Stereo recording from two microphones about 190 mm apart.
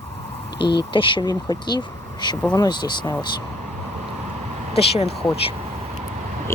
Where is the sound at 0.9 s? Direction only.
25° left (ahead or behind).